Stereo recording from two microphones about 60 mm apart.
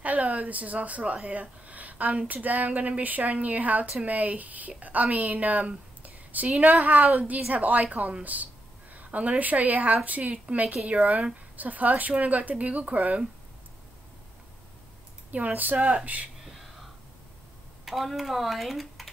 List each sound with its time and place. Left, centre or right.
0.0 s a woman's voice: right
15.3 s speech: right
17.8 s speech: centre